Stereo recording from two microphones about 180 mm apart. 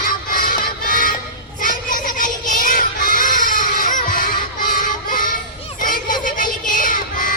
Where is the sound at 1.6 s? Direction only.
50° left (ahead or behind).